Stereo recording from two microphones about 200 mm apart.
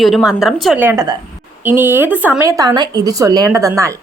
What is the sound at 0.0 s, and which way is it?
A woman's voice, centre (ahead or behind).